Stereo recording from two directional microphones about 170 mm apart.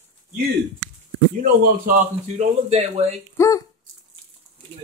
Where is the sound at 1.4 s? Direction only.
55° right (ahead or behind); by 3.2 s 40° right (ahead or behind).